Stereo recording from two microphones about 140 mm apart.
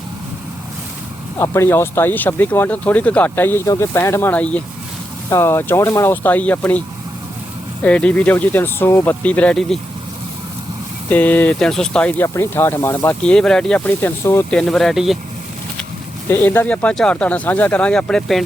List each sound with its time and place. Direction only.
1.4 s speech: 20° left (ahead or behind)
11.1 s speech: 10° left (ahead or behind)
14.5 s speech: 5° left (ahead or behind)
16.3 s speech: 15° left (ahead or behind)